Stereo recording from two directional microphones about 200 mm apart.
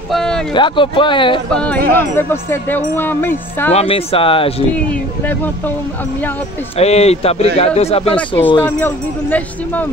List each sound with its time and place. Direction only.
0.1 s a sound: 5° left (ahead or behind)
0.6 s speech: 25° left (ahead or behind)
1.5 s speech: 5° left (ahead or behind)
1.9 s music: 10° left (ahead or behind)
3.7 s speech: 30° left (ahead or behind)
6.8 s speech: 30° left (ahead or behind)
8.6 s music: 10° left (ahead or behind)